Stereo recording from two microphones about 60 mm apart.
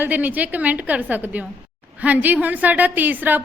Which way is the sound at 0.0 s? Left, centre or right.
Right.